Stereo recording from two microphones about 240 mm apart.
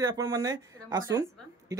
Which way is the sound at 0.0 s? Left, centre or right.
Centre.